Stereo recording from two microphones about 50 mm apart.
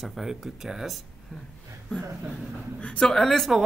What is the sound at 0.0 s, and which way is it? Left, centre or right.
Speech, centre.